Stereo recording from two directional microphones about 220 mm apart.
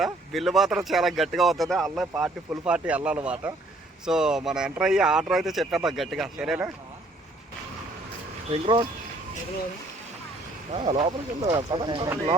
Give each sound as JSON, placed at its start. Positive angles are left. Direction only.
{"t": 0.0, "sound": "speech", "side_deg": 0}
{"t": 8.4, "sound": "speech", "side_deg": -20}
{"t": 10.8, "sound": "speech", "side_deg": -25}